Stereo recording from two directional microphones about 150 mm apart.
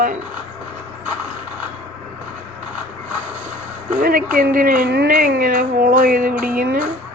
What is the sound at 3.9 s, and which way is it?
Speech, 65° right (ahead or behind).